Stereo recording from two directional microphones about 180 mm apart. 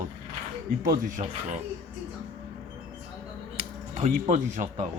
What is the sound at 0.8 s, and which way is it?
Speech, 50° right (ahead or behind).